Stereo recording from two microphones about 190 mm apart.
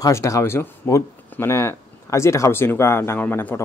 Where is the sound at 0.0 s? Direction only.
15° left (ahead or behind).